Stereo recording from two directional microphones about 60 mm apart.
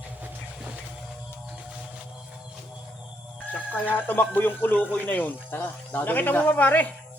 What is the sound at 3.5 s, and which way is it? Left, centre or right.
Speech, left.